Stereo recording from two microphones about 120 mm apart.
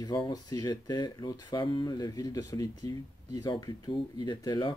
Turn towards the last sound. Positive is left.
turn(degrees=40)  # may be behind; listen again after turning